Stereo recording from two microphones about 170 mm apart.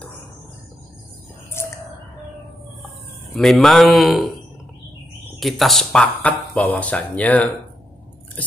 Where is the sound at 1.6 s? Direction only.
15° left (ahead or behind).